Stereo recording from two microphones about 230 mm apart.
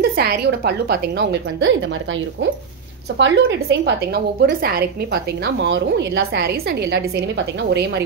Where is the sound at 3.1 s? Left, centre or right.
Right.